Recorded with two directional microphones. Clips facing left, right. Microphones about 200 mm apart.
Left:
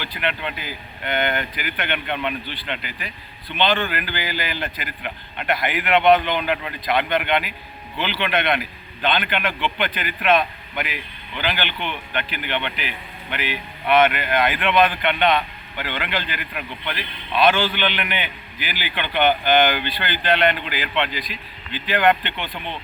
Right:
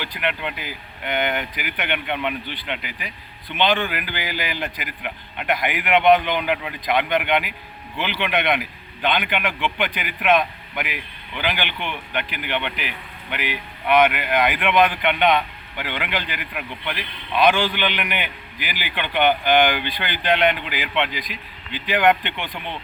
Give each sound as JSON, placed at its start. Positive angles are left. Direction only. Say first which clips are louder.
{"t": 0.0, "sound": "speech", "louder": "even", "side_deg": -10}